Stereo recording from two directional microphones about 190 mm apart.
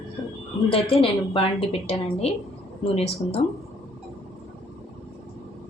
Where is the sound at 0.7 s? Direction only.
30° left (ahead or behind).